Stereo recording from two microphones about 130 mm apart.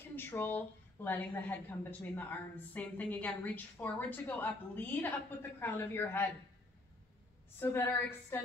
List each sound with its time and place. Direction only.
0.1 s a woman's voice: 15° left (ahead or behind)
7.5 s a woman's voice: 15° left (ahead or behind)